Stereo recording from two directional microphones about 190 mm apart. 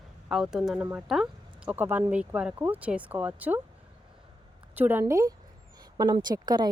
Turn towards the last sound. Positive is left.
turn(degrees=-20)  # may be behind; listen again after turning